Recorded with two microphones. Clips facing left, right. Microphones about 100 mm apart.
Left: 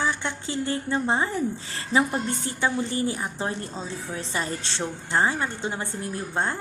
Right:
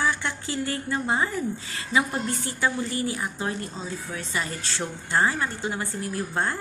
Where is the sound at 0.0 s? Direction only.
20° left (ahead or behind).